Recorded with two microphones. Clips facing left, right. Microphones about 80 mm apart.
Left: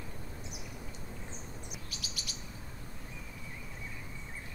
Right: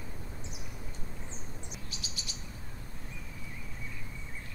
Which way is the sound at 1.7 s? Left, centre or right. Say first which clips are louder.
Even; right.